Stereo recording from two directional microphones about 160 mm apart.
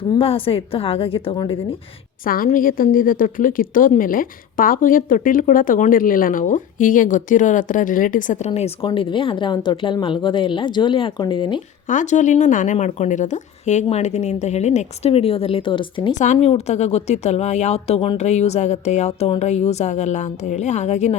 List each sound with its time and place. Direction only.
0.2 s speech: 35° left (ahead or behind)
2.2 s a woman's voice: 60° left (ahead or behind)
8.4 s speech: 40° left (ahead or behind)
11.9 s speech: 50° left (ahead or behind); by 16.1 s 30° left (ahead or behind)
16.1 s speech: 45° left (ahead or behind)